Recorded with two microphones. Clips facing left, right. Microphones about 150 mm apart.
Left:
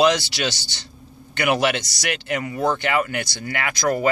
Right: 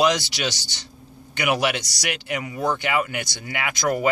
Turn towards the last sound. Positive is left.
turn(degrees=-15)  # may be behind; listen again after turning